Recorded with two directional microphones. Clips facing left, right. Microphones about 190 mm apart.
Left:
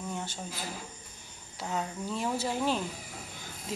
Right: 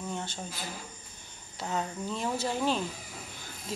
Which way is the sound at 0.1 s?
10° left (ahead or behind).